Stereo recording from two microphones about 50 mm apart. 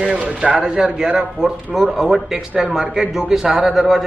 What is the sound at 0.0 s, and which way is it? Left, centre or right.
A man's voice, centre.